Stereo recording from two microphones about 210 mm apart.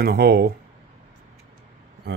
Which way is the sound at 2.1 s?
50° right (ahead or behind).